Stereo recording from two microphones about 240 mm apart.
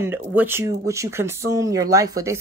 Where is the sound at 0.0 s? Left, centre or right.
Centre.